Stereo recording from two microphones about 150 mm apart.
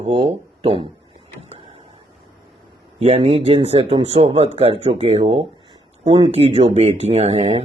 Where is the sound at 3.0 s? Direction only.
45° right (ahead or behind).